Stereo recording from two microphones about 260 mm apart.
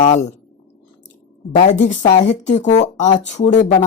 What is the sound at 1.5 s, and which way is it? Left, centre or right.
Speech, left.